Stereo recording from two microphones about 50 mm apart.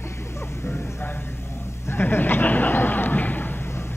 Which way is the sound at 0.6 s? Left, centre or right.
Left.